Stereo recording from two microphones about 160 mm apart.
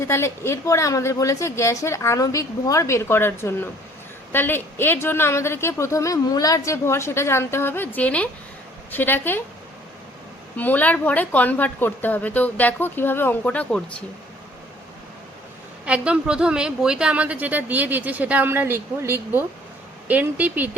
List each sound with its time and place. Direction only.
0.0 s speech: 15° left (ahead or behind)
10.6 s speech: 10° left (ahead or behind)
15.9 s a woman's voice: 5° right (ahead or behind)